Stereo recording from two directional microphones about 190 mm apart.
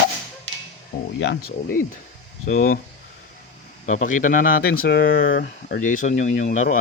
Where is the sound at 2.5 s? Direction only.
45° left (ahead or behind).